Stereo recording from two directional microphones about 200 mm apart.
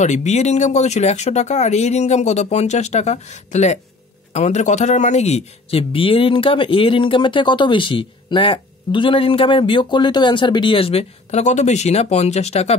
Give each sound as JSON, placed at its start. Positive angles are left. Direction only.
{"t": 0.0, "sound": "speech", "side_deg": 35}